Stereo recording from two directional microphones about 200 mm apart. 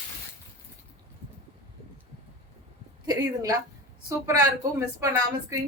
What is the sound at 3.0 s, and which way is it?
A woman's voice, 15° right (ahead or behind).